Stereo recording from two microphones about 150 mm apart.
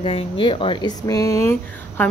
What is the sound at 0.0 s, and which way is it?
A woman's voice, 40° left (ahead or behind).